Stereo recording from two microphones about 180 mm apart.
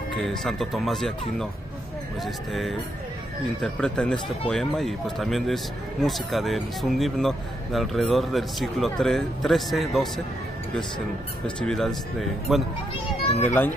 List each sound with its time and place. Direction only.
0.1 s speech: centre (ahead or behind)
11.4 s speech: 5° left (ahead or behind)
13.4 s a child's voice: 10° left (ahead or behind)